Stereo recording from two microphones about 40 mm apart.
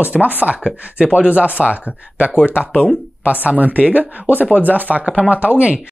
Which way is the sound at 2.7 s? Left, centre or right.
Left.